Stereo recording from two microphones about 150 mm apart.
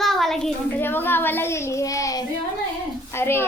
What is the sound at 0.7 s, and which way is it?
A child's voice, 15° left (ahead or behind).